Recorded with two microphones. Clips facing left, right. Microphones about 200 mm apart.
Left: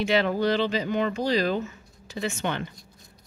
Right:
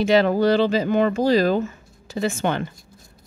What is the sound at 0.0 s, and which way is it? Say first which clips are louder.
Speech: right 6 dB; 40° right (ahead or behind).